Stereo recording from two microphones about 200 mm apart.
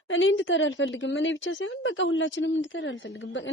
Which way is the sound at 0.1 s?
75° left (ahead or behind).